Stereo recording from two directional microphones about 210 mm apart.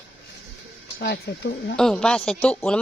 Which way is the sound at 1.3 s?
55° left (ahead or behind).